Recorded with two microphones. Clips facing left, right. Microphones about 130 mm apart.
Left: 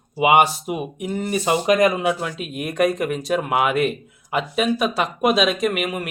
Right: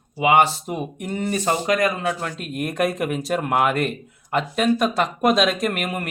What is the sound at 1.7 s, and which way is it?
Speech, 20° left (ahead or behind).